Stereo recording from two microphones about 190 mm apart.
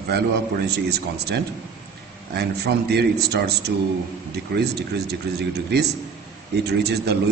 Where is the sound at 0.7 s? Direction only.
60° right (ahead or behind).